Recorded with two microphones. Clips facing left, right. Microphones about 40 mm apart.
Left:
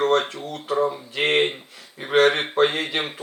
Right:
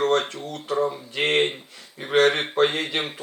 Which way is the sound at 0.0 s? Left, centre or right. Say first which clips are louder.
Left 1 dB; centre.